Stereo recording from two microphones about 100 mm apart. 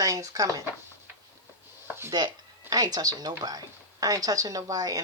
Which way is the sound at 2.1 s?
40° right (ahead or behind).